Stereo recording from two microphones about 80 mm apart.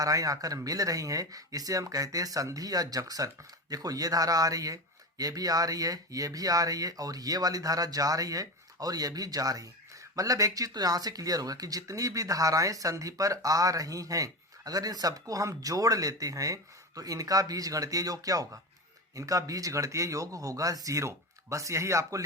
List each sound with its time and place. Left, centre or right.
0.0 s speech: right